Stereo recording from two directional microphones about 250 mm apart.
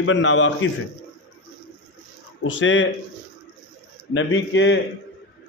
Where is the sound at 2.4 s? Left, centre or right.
Left.